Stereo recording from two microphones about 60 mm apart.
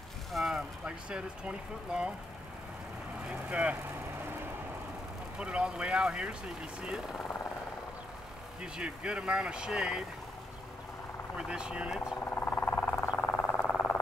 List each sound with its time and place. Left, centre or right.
0.3 s a sound: centre
0.8 s speech: centre
3.3 s speech: right
5.4 s speech: centre
8.5 s speech: centre
11.3 s speech: centre
12.3 s a sound: left